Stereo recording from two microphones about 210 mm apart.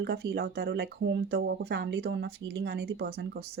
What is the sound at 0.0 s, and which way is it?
Speech, 50° right (ahead or behind).